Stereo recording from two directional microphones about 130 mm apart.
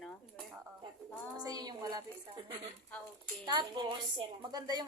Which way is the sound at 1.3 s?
30° right (ahead or behind).